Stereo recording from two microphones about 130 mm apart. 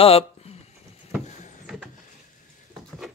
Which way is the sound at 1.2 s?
65° left (ahead or behind).